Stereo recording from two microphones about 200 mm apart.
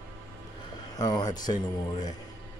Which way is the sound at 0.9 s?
20° left (ahead or behind).